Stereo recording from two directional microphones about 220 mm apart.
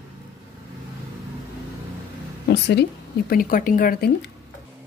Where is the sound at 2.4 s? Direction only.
50° left (ahead or behind).